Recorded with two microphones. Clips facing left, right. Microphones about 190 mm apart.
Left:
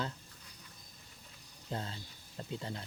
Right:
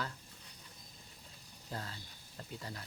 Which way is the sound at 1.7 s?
25° left (ahead or behind).